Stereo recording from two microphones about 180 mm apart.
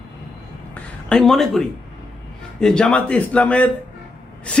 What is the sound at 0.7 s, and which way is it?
A woman's voice, 5° left (ahead or behind).